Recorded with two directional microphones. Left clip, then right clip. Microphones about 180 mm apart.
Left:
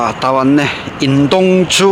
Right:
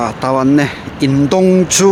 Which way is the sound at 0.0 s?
15° right (ahead or behind).